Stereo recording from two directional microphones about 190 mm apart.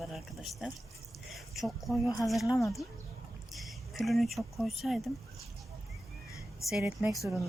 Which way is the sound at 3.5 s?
Centre (ahead or behind).